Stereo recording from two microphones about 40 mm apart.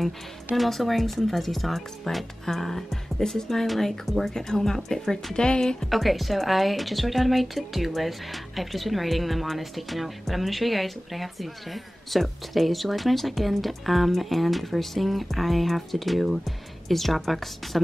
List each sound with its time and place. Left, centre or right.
0.6 s speech: centre
5.3 s a woman's voice: left
5.9 s speech: centre